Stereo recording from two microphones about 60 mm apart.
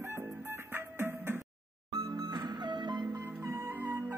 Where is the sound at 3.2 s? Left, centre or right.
Right.